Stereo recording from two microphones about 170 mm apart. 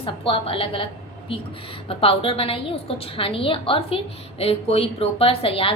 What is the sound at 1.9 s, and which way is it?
A woman's voice, 35° left (ahead or behind).